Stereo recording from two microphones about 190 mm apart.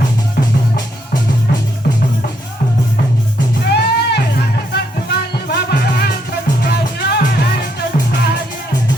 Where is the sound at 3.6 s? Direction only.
60° left (ahead or behind).